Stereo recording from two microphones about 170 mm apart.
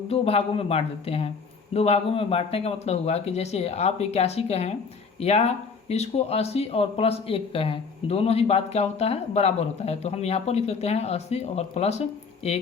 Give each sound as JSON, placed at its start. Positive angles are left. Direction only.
{"t": 0.1, "sound": "speech", "side_deg": 35}